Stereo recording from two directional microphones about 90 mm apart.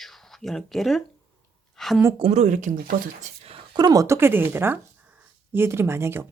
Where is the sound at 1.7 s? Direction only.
5° left (ahead or behind).